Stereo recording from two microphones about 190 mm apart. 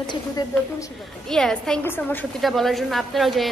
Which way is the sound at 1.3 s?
Centre (ahead or behind).